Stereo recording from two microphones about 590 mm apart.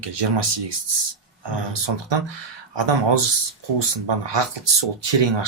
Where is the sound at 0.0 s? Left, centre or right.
Right.